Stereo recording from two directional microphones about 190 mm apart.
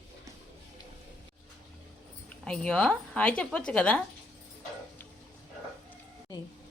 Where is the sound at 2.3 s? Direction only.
5° left (ahead or behind).